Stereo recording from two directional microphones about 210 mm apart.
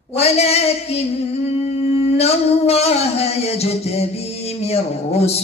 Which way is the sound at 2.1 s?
30° left (ahead or behind).